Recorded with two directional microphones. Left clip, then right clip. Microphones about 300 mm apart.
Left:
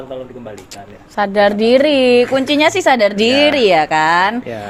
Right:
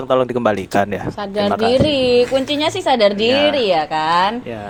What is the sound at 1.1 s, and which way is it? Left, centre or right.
A woman's voice, left.